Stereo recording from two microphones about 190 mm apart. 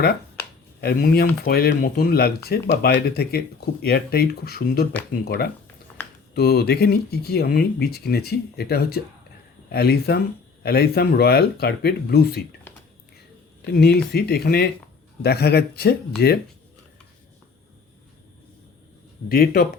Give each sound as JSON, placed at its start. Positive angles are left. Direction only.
{"t": 0.8, "sound": "speech", "side_deg": 50}
{"t": 6.0, "sound": "a sound", "side_deg": 10}
{"t": 6.3, "sound": "speech", "side_deg": 55}
{"t": 13.6, "sound": "speech", "side_deg": 55}
{"t": 19.3, "sound": "speech", "side_deg": 55}